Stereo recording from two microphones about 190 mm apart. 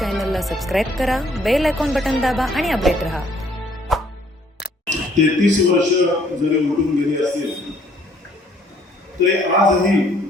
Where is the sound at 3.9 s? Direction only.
Centre (ahead or behind).